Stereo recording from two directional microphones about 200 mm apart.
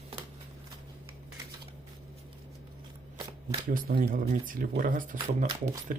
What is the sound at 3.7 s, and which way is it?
Speech, 45° right (ahead or behind).